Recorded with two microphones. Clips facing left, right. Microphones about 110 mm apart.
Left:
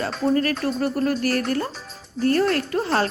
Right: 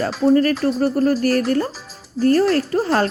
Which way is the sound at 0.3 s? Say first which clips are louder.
Right 6 dB; 35° right (ahead or behind).